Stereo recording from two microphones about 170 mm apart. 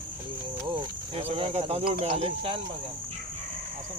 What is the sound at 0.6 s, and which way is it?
Speech, 25° right (ahead or behind).